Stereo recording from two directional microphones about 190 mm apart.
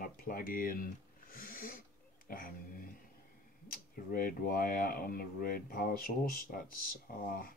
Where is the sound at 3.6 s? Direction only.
45° left (ahead or behind).